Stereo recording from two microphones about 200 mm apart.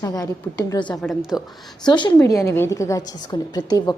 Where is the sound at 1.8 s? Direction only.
20° left (ahead or behind).